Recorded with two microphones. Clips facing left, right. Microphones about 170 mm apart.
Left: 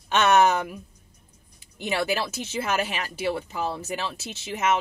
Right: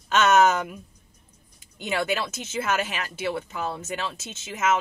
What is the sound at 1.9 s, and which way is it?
Speech, 30° left (ahead or behind).